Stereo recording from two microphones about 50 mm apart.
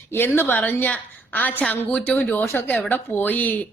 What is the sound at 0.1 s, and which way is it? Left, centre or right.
Speech, left.